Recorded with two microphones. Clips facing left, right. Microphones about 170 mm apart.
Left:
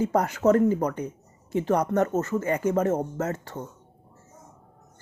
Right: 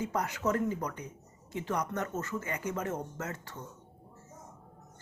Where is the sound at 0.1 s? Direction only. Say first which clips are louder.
Left 10 dB; 50° left (ahead or behind).